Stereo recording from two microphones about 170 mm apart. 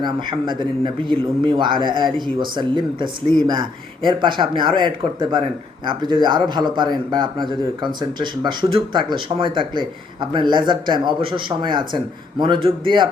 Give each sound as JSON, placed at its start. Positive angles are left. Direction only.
{"t": 0.0, "sound": "speech", "side_deg": -25}